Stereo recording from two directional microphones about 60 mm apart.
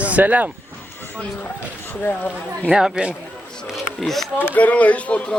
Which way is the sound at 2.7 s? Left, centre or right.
Centre.